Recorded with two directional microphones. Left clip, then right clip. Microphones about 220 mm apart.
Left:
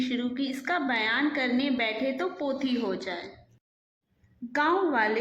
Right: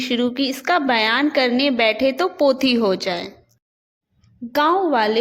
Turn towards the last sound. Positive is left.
turn(degrees=-35)  # may be behind; listen again after turning